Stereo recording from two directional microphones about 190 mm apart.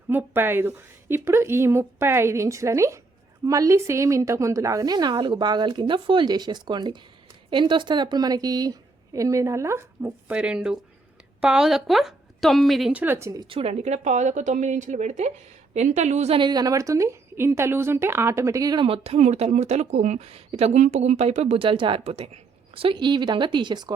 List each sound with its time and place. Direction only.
0.1 s a woman's voice: 10° right (ahead or behind)